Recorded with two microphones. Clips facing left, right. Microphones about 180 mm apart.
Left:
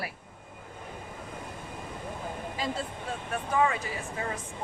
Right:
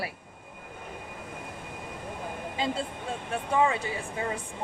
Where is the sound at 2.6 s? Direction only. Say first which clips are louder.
Right 3 dB; 25° right (ahead or behind).